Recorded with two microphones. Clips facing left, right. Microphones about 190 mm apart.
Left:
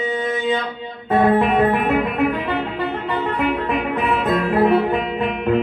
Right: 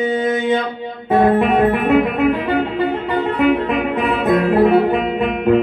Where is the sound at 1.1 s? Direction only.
50° right (ahead or behind).